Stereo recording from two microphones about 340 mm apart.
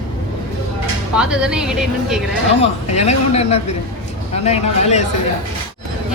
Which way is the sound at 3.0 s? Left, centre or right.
Centre.